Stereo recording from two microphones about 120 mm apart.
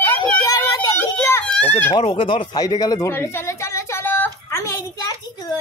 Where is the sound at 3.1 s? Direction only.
20° left (ahead or behind).